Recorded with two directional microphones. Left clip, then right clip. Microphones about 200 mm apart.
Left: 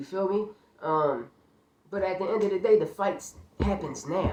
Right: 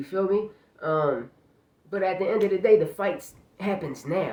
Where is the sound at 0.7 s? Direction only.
25° right (ahead or behind).